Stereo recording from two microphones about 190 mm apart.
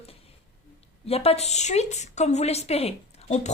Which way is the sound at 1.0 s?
30° left (ahead or behind).